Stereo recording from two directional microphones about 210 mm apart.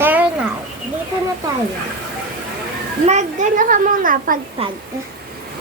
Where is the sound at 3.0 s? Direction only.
35° right (ahead or behind).